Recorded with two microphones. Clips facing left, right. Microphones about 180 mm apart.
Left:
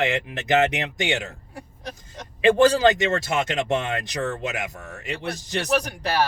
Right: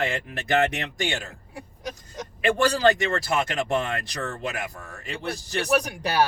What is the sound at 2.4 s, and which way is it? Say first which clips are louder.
Speech: left 4 dB; 20° left (ahead or behind).